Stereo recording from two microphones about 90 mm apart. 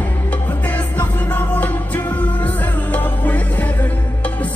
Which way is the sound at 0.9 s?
20° left (ahead or behind).